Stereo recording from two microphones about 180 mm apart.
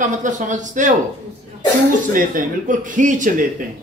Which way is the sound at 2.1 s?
50° right (ahead or behind).